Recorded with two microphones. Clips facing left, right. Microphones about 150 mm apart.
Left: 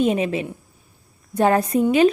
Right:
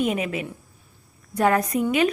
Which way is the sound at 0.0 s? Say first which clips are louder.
Left 5 dB; 30° left (ahead or behind).